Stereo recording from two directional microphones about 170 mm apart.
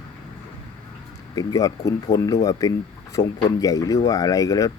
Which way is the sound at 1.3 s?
20° left (ahead or behind).